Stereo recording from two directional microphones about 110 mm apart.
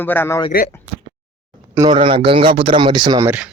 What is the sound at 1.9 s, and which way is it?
Speech, 50° right (ahead or behind).